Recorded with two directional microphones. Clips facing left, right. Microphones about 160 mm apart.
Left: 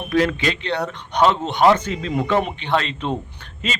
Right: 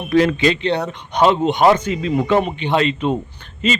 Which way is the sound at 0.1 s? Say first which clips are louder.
Right 5 dB; 25° right (ahead or behind).